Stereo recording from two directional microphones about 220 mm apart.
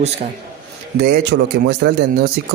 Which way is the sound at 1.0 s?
50° right (ahead or behind).